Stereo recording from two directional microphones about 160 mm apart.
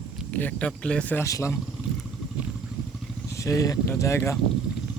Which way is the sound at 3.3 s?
20° left (ahead or behind).